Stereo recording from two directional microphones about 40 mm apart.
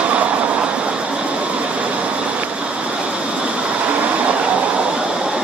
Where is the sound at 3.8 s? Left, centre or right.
Right.